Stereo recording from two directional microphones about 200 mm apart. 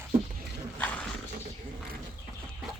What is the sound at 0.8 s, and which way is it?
Roaring cats, 5° left (ahead or behind).